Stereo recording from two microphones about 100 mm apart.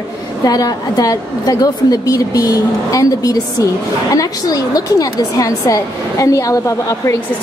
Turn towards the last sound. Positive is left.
turn(degrees=30)  # may be behind; listen again after turning